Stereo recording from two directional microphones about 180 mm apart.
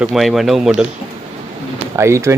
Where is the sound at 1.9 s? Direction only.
15° right (ahead or behind).